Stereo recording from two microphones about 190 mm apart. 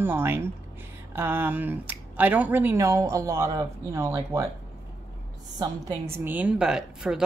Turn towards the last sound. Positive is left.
turn(degrees=-5)  # may be behind; listen again after turning